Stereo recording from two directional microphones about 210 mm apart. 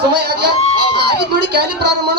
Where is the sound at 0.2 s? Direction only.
50° right (ahead or behind).